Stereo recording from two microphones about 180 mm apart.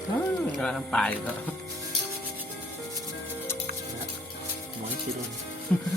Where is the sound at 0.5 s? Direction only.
Centre (ahead or behind).